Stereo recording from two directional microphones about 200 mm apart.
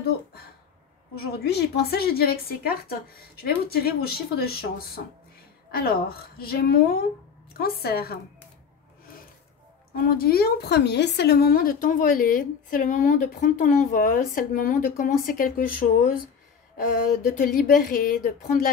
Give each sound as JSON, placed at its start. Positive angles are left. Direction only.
{"t": 1.1, "sound": "a woman's voice", "side_deg": 50}
{"t": 9.9, "sound": "a woman's voice", "side_deg": 50}
{"t": 17.3, "sound": "a woman's voice", "side_deg": 45}